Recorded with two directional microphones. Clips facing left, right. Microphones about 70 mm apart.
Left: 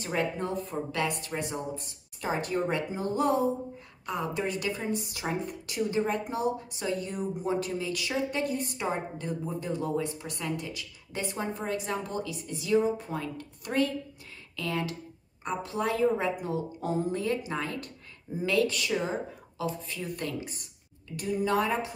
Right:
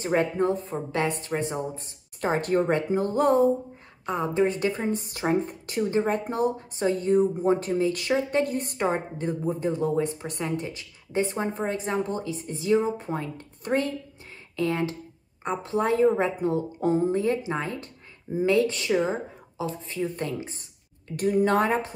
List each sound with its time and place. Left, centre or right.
0.0 s speech: right
2.2 s speech: right
4.0 s a woman's voice: right
21.2 s speech: right